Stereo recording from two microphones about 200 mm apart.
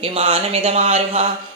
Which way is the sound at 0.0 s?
30° right (ahead or behind).